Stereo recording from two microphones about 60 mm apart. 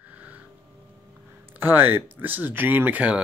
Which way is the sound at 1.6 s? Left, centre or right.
Right.